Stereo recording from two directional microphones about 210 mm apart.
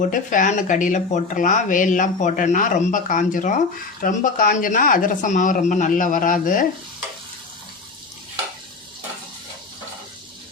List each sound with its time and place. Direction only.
0.0 s speech: 40° left (ahead or behind)